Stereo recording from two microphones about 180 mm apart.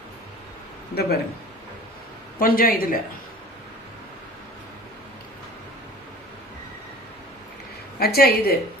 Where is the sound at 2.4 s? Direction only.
50° left (ahead or behind).